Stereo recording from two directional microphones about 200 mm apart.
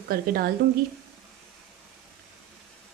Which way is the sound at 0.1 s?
45° right (ahead or behind).